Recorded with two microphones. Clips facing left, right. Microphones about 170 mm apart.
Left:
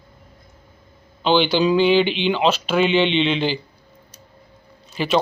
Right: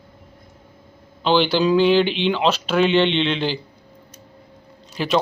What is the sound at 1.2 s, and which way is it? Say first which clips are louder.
Speech: even; centre (ahead or behind).